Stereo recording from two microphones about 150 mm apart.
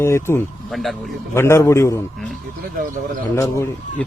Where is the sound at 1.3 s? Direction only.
15° left (ahead or behind).